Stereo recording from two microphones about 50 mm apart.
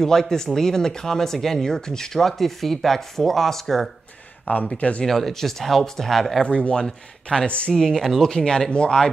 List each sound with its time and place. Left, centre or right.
0.0 s speech: centre
4.7 s speech: left
5.0 s speech: centre
6.4 s speech: left
7.7 s speech: centre